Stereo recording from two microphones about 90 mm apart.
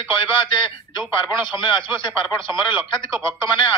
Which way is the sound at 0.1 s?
65° left (ahead or behind).